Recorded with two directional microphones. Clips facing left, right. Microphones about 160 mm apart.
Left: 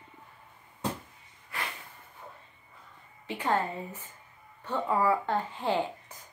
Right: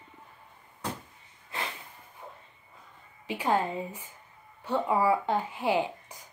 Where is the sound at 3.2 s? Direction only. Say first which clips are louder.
Right 2 dB; 15° right (ahead or behind).